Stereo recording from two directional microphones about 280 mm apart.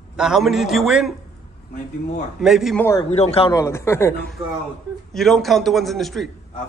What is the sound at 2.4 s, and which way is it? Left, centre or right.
Speech, centre.